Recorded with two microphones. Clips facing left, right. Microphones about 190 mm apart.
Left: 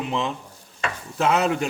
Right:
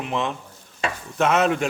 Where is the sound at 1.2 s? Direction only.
30° left (ahead or behind).